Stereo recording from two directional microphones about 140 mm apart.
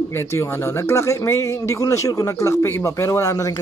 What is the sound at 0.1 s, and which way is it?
Speech, 20° left (ahead or behind).